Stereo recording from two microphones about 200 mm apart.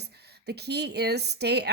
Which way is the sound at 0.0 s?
55° right (ahead or behind).